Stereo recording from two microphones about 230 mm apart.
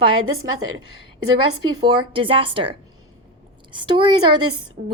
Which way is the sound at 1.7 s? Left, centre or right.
Centre.